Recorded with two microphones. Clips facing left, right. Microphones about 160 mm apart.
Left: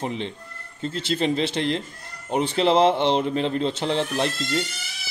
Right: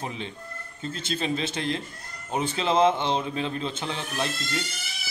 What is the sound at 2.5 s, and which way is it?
Speech, 70° left (ahead or behind).